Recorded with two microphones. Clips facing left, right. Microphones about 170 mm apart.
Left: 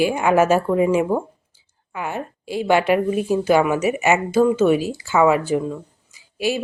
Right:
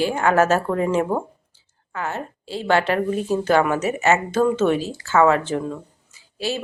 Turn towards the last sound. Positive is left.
turn(degrees=15)  # may be behind; listen again after turning